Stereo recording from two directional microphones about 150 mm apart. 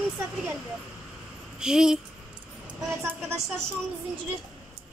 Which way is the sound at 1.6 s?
5° right (ahead or behind).